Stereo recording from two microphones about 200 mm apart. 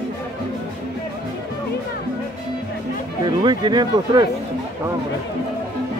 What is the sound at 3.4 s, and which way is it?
Speech, 20° right (ahead or behind).